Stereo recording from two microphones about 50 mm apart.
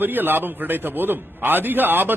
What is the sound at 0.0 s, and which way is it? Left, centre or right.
A man's voice, right.